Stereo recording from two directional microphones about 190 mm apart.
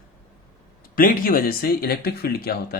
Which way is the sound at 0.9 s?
50° left (ahead or behind).